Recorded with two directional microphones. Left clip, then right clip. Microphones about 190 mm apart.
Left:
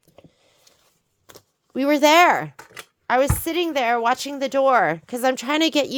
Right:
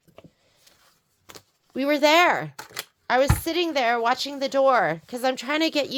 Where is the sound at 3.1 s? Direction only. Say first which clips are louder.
Left 2 dB; 40° left (ahead or behind).